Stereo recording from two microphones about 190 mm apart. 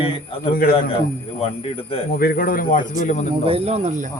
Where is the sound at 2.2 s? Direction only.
50° left (ahead or behind).